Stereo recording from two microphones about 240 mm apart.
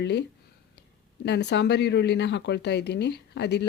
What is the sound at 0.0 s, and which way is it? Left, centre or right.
Speech, left.